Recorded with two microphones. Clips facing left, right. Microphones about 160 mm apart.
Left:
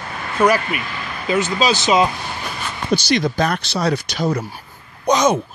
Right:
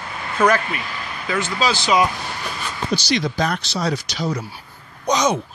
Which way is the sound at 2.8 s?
50° left (ahead or behind).